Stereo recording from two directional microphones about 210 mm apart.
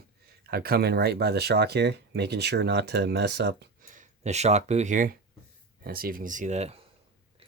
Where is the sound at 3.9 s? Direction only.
35° right (ahead or behind).